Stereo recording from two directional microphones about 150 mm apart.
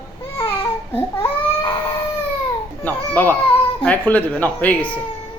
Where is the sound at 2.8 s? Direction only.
15° left (ahead or behind).